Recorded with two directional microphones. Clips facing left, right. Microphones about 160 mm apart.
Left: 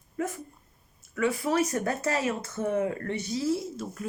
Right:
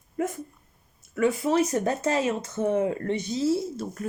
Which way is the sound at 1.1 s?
20° right (ahead or behind).